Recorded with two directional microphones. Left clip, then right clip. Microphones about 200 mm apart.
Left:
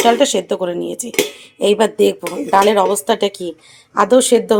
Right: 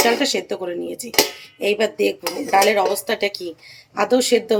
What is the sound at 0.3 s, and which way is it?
Speech, 30° left (ahead or behind).